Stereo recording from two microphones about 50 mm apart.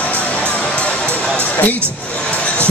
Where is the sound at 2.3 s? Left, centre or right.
Left.